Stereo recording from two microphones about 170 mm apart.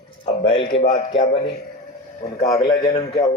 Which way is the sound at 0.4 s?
30° left (ahead or behind).